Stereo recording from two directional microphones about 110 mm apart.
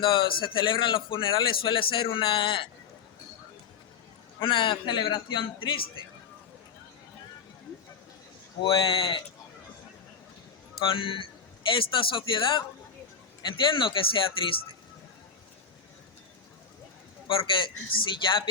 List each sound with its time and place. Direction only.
0.0 s a man's voice: 50° left (ahead or behind)
4.4 s a man's voice: 50° left (ahead or behind)
8.6 s a man's voice: 55° left (ahead or behind)
10.8 s a man's voice: 50° left (ahead or behind)
13.7 s a man's voice: 50° left (ahead or behind)
17.2 s a man's voice: 50° left (ahead or behind)